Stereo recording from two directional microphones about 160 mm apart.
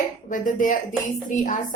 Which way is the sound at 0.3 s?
55° left (ahead or behind).